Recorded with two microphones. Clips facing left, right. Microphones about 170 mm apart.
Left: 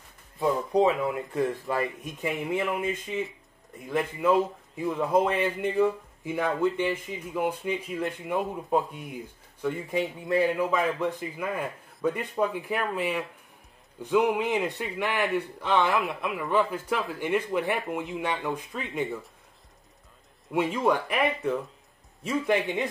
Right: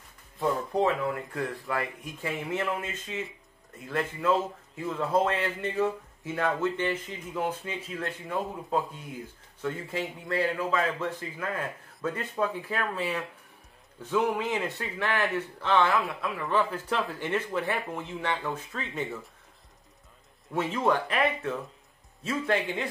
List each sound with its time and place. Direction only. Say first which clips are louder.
0.4 s speech: left 3 dB; 15° left (ahead or behind)
20.5 s speech: left 2 dB; 10° left (ahead or behind)